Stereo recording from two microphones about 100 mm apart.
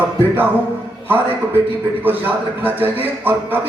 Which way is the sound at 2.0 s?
20° right (ahead or behind).